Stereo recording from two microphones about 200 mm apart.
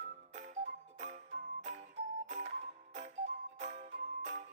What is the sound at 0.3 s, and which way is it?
Music, 35° right (ahead or behind).